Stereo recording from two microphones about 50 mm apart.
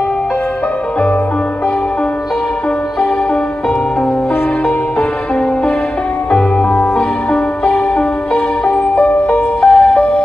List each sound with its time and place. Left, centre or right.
6.3 s music: centre
9.3 s music: centre